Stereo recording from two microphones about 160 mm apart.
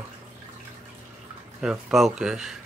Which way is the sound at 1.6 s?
5° right (ahead or behind).